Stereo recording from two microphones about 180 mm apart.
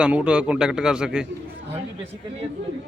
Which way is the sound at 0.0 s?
5° right (ahead or behind).